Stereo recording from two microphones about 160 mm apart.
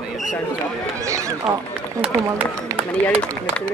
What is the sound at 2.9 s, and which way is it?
Speech, 5° left (ahead or behind).